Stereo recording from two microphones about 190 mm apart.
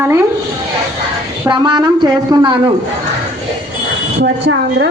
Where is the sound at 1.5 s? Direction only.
25° right (ahead or behind).